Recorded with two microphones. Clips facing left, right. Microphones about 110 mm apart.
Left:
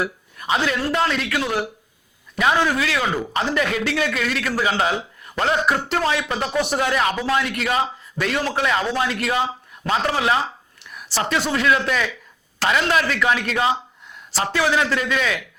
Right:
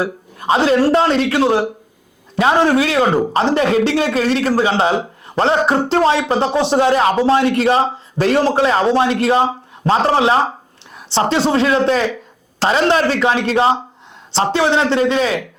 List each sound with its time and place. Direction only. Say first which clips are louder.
0.0 s speech: right 6 dB; 30° right (ahead or behind)
12.5 s a sound: right 5 dB; 30° right (ahead or behind)
12.9 s a man's voice: right 5 dB; 30° right (ahead or behind)